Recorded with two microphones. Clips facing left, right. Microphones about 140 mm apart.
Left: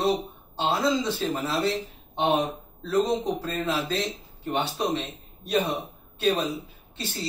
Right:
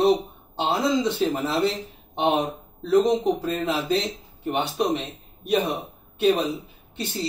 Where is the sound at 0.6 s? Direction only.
20° right (ahead or behind).